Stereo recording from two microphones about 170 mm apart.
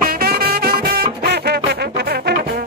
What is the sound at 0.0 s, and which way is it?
Music, 65° right (ahead or behind).